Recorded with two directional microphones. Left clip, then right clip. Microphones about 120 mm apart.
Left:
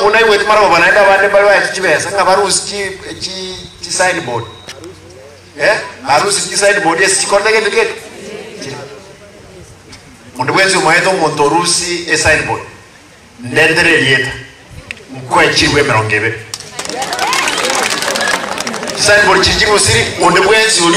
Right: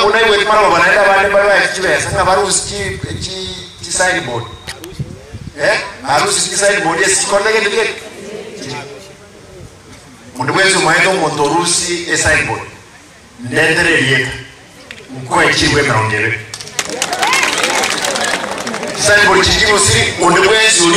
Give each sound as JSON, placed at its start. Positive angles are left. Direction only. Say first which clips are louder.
{"t": 0.0, "sound": "a man's voice", "louder": "left 1 dB", "side_deg": 35}
{"t": 5.6, "sound": "a man's voice", "louder": "left 2 dB", "side_deg": 35}
{"t": 10.3, "sound": "a man's voice", "louder": "left 1 dB", "side_deg": 35}
{"t": 17.9, "sound": "speech", "louder": "left 2 dB", "side_deg": 35}